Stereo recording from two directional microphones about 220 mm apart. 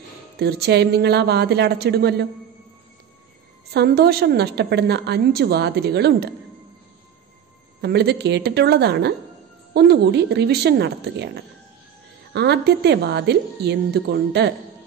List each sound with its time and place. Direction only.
0.4 s a woman's voice: 50° right (ahead or behind)
3.7 s a woman's voice: 45° right (ahead or behind)
7.8 s a woman's voice: 50° right (ahead or behind)